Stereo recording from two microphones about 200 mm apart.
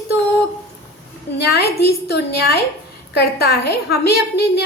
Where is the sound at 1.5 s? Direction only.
55° left (ahead or behind).